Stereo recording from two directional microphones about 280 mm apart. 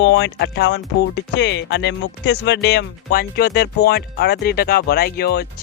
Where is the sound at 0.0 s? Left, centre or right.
Left.